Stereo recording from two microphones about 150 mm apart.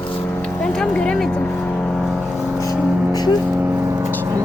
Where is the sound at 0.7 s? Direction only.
5° left (ahead or behind).